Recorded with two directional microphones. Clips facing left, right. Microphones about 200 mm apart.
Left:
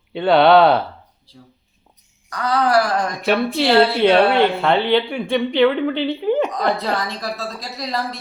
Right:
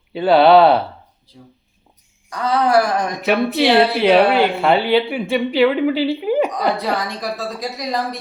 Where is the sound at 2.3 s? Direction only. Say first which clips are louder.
Right 1 dB; 25° right (ahead or behind).